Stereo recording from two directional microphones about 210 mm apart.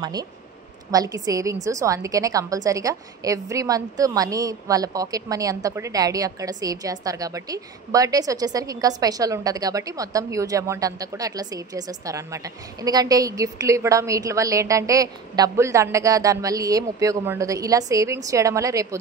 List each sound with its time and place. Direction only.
0.0 s a woman's voice: 20° right (ahead or behind)